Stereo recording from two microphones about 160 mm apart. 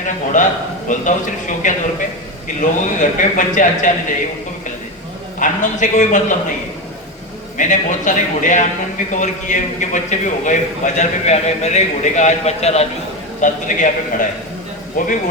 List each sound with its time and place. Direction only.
0.4 s a man's voice: 50° left (ahead or behind)
5.4 s a man's voice: 50° left (ahead or behind)
7.5 s a man's voice: 50° left (ahead or behind)
13.4 s a man's voice: 50° left (ahead or behind)